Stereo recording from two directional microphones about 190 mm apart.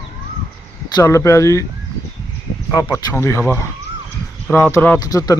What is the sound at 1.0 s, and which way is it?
Speech, 15° left (ahead or behind).